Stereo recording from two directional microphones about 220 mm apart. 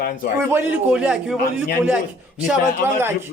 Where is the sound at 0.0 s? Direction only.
40° left (ahead or behind).